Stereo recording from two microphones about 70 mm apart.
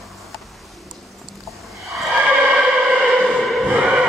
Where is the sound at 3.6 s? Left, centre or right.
Centre.